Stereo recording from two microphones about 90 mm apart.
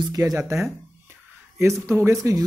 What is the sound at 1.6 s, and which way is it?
Speech, 30° right (ahead or behind).